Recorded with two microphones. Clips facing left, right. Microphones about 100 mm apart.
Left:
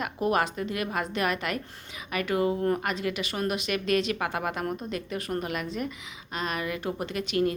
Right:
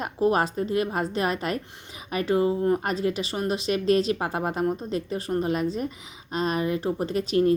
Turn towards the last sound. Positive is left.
turn(degrees=-35)  # may be behind; listen again after turning